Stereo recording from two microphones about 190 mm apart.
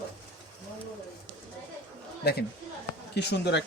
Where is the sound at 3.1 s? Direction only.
60° left (ahead or behind).